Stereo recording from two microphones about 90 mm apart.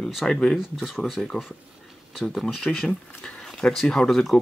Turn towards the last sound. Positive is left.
turn(degrees=5)  # may be behind; listen again after turning